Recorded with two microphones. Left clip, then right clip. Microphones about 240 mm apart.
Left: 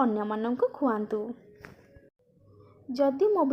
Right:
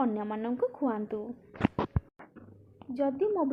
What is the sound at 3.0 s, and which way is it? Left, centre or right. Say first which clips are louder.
Speech: left 5 dB; left.